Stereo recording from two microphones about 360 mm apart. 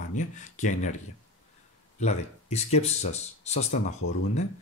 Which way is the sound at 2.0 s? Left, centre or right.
Centre.